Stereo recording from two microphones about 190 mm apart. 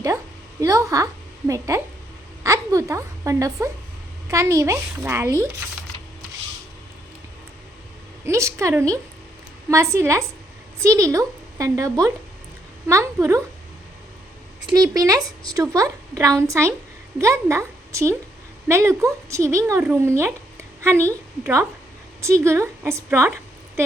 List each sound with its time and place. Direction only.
0.6 s a woman's voice: 15° right (ahead or behind)
8.2 s a woman's voice: 15° right (ahead or behind)
14.7 s a woman's voice: 20° right (ahead or behind)